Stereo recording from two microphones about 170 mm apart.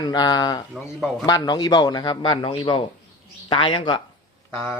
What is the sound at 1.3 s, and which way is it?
A man's voice, 25° left (ahead or behind).